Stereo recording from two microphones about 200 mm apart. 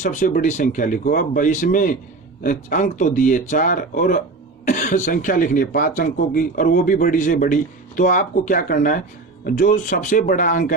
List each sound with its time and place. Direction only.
0.0 s speech: 40° left (ahead or behind)